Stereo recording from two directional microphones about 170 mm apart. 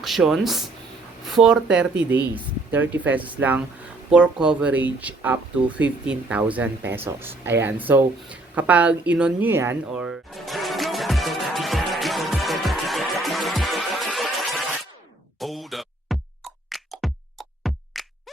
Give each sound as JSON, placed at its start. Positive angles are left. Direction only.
{"t": 0.0, "sound": "speech", "side_deg": 0}
{"t": 7.2, "sound": "a sound", "side_deg": -15}
{"t": 15.4, "sound": "music", "side_deg": 0}